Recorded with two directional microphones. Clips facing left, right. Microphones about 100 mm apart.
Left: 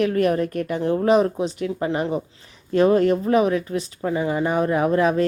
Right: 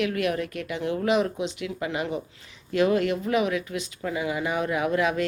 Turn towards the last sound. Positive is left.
turn(degrees=35)  # may be behind; listen again after turning